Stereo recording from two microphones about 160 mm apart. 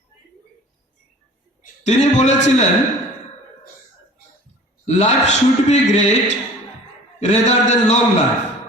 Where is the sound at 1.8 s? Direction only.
45° left (ahead or behind).